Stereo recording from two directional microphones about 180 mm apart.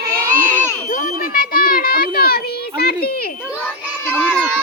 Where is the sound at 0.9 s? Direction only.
50° left (ahead or behind).